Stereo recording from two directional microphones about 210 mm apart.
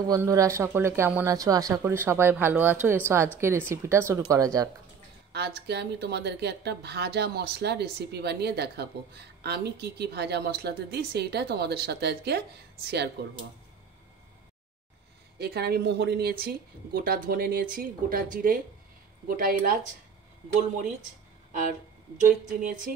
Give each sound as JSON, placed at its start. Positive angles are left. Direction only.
{"t": 0.1, "sound": "speech", "side_deg": -15}
{"t": 5.3, "sound": "speech", "side_deg": -50}
{"t": 15.3, "sound": "speech", "side_deg": -50}